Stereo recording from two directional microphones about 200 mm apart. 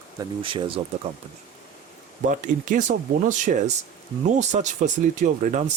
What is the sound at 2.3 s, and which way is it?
Speech, 40° right (ahead or behind).